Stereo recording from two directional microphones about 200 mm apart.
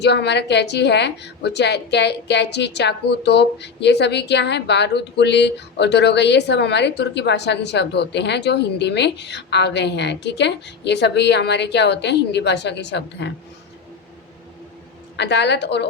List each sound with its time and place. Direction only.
0.0 s a woman's voice: 60° left (ahead or behind)
15.1 s a woman's voice: 60° left (ahead or behind)